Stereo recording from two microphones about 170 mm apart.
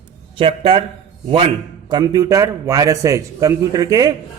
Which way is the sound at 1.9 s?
20° right (ahead or behind).